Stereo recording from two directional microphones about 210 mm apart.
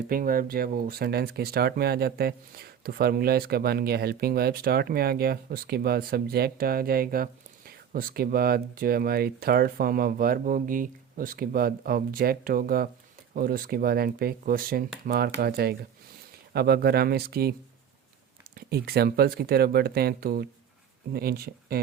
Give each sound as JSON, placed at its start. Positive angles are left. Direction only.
{"t": 0.1, "sound": "speech", "side_deg": -45}
{"t": 18.5, "sound": "speech", "side_deg": -50}